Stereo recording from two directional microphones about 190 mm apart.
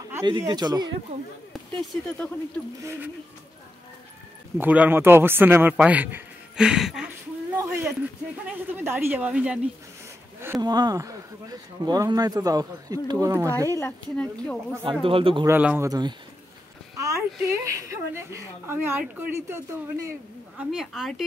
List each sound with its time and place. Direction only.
0.1 s speech: 15° right (ahead or behind)
1.5 s speech: 5° left (ahead or behind)
4.6 s a woman's voice: 10° right (ahead or behind)
7.5 s a sound: 15° right (ahead or behind)
8.7 s a woman's voice: 10° right (ahead or behind)
10.4 s speech: 15° right (ahead or behind)
13.7 s speech: 10° left (ahead or behind)
15.0 s speech: 30° right (ahead or behind)
15.4 s a woman's voice: 10° right (ahead or behind)
20.5 s a woman's voice: centre (ahead or behind)